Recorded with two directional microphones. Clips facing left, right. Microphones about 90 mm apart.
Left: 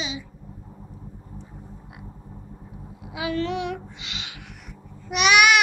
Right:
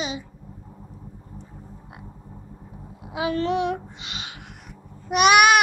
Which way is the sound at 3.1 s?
35° right (ahead or behind).